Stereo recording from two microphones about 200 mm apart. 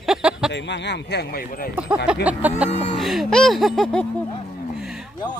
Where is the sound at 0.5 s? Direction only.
60° left (ahead or behind); by 1.7 s 45° left (ahead or behind).